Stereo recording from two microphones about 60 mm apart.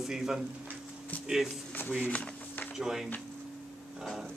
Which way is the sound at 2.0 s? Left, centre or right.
Left.